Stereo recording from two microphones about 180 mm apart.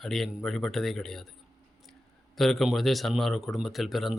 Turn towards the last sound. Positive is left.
turn(degrees=0)  # may be behind; listen again after turning